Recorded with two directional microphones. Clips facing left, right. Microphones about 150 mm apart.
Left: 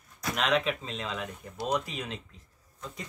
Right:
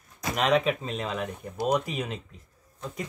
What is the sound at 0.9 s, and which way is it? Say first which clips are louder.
Speech: right 5 dB; 10° right (ahead or behind).